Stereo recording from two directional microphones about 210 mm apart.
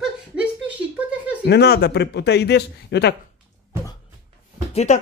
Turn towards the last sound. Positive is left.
turn(degrees=35)  # may be behind; listen again after turning